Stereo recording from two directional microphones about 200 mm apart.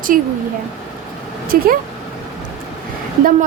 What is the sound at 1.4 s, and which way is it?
Speech, 45° right (ahead or behind).